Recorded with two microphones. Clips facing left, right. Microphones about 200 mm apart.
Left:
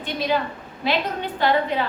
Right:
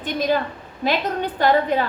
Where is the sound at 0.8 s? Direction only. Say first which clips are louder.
Right 2 dB; 45° right (ahead or behind).